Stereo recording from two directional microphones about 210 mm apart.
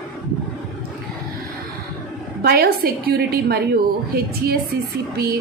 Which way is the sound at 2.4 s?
50° right (ahead or behind).